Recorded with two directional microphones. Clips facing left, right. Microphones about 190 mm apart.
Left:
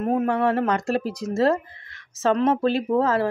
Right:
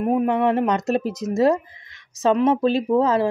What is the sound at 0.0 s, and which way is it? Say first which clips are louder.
Speech: right 2 dB; 15° right (ahead or behind).